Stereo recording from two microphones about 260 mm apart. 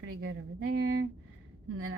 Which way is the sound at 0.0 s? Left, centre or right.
Right.